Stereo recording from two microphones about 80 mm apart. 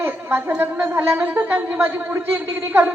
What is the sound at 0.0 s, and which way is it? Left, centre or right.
A man's voice, right.